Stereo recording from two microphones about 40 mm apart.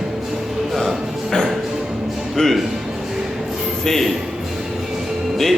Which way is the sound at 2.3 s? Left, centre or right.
Centre.